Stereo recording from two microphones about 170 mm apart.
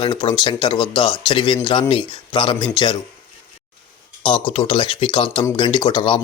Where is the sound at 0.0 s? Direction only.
25° left (ahead or behind).